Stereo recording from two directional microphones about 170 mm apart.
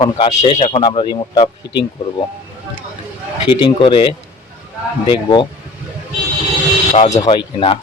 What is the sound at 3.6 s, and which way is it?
Speech, 30° left (ahead or behind).